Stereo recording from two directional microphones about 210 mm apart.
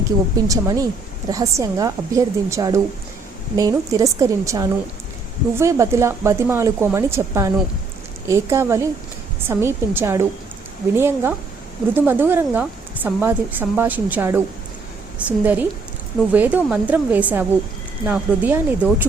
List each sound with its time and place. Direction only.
0.3 s a woman's voice: 15° right (ahead or behind)